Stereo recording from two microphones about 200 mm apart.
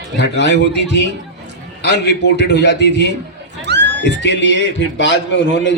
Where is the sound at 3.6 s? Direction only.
60° right (ahead or behind).